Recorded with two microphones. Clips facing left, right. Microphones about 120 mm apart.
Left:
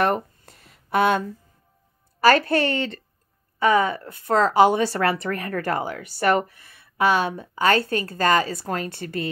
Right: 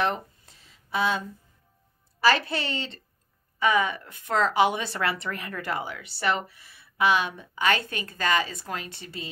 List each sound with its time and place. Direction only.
0.0 s a sound: 55° left (ahead or behind)
2.1 s a woman's voice: 50° left (ahead or behind)
3.5 s a woman's voice: 40° left (ahead or behind)